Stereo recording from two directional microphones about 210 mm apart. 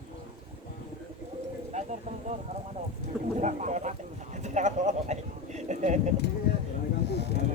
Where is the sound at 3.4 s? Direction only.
35° right (ahead or behind).